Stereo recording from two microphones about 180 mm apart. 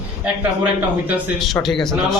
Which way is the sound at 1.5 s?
Centre (ahead or behind).